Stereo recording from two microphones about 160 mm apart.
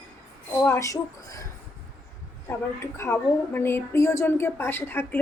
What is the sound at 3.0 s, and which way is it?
A woman's voice, 15° left (ahead or behind).